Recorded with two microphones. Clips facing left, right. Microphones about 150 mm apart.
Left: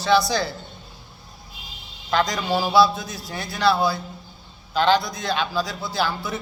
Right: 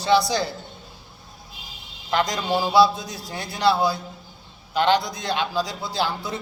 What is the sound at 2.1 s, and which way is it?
A man's voice, 15° right (ahead or behind).